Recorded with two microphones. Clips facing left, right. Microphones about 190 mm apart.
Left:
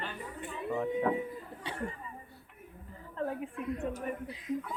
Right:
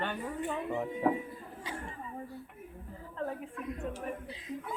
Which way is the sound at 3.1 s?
5° left (ahead or behind).